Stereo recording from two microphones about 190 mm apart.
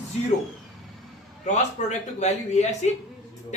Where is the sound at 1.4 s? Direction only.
35° left (ahead or behind).